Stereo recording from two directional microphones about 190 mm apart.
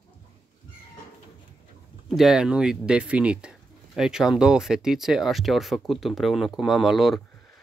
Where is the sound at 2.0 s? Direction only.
Centre (ahead or behind).